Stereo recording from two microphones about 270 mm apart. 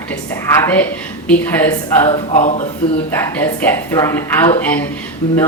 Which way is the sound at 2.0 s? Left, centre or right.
Left.